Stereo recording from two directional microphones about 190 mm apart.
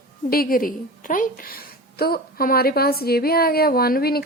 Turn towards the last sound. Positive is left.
turn(degrees=55)  # may be behind; listen again after turning